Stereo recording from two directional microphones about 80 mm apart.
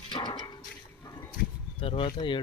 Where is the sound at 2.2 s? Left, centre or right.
Left.